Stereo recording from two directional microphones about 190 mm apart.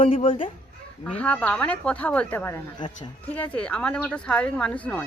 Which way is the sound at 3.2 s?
10° left (ahead or behind).